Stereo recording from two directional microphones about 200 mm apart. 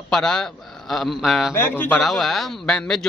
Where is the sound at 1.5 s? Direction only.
10° left (ahead or behind).